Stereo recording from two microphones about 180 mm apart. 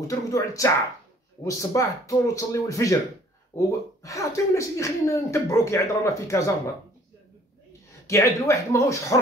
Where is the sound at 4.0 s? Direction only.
20° left (ahead or behind).